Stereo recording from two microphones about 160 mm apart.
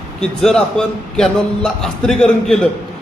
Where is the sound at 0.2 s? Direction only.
5° left (ahead or behind).